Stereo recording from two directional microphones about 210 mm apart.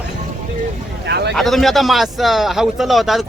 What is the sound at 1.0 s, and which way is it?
Speech, 50° right (ahead or behind).